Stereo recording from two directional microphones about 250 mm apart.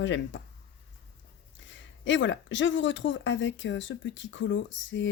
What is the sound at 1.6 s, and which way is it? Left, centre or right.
Speech, left.